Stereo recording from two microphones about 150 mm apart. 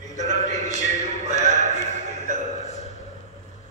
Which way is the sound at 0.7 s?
55° left (ahead or behind).